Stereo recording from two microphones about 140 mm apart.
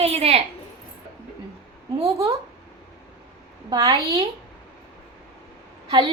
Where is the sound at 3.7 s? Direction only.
25° right (ahead or behind).